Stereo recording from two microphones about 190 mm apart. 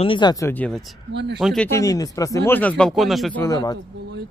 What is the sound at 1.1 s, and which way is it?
Speech, 65° right (ahead or behind).